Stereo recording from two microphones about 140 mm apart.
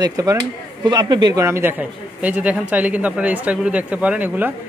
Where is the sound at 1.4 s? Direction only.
15° right (ahead or behind).